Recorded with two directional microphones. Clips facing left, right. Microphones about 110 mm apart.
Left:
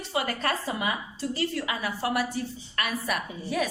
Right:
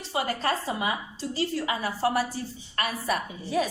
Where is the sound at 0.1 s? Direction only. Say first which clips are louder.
Right 1 dB; 30° right (ahead or behind).